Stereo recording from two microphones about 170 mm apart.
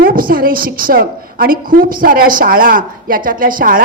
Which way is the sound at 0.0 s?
60° right (ahead or behind).